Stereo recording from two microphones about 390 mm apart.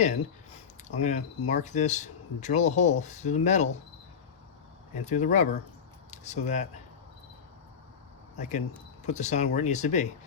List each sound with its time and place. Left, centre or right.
0.0 s a sound: centre
1.5 s speech: centre
5.0 s speech: centre
8.4 s speech: centre